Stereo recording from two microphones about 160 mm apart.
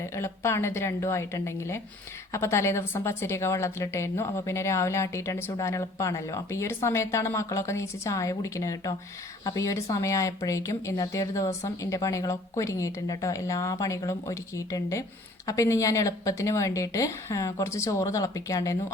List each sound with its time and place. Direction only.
0.0 s a woman's voice: 15° left (ahead or behind)